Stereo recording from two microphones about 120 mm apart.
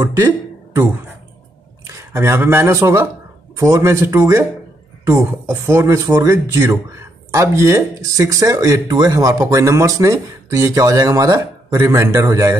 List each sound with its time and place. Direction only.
0.0 s speech: 25° right (ahead or behind)
2.0 s speech: 20° right (ahead or behind)